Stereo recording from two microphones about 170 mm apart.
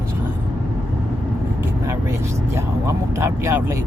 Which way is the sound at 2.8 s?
15° right (ahead or behind).